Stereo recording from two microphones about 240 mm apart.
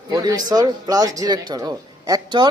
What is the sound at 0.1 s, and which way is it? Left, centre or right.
Speech, centre.